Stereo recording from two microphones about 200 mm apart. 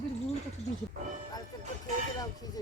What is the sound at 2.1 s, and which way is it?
Speech, 20° left (ahead or behind).